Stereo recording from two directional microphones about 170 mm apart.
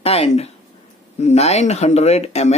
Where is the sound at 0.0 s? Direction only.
35° left (ahead or behind).